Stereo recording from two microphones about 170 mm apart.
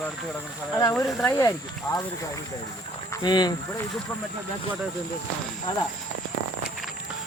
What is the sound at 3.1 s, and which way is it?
Speech, 25° left (ahead or behind).